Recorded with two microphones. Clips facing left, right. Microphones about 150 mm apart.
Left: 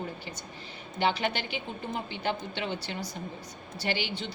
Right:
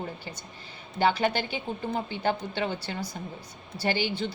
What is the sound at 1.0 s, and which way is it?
A woman's voice, 40° right (ahead or behind).